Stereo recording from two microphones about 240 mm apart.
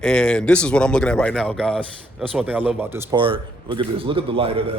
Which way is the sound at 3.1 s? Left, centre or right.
Right.